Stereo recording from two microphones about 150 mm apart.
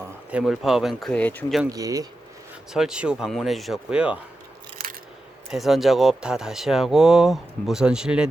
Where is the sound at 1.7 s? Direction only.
25° right (ahead or behind).